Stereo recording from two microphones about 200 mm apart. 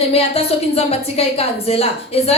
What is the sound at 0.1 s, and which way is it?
Speech, 30° left (ahead or behind).